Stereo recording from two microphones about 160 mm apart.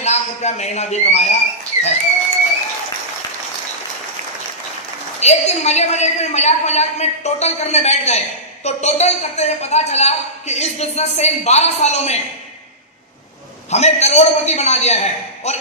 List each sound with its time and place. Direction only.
0.0 s speech: 45° left (ahead or behind)
5.2 s a woman's voice: 45° left (ahead or behind)
13.7 s a woman's voice: 45° left (ahead or behind)